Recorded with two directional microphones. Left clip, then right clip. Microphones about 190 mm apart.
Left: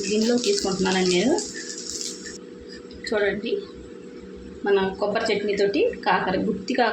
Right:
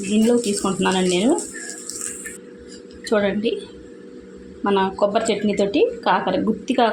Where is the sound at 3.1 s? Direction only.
35° right (ahead or behind).